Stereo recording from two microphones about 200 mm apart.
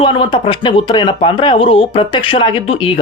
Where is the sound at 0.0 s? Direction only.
25° left (ahead or behind).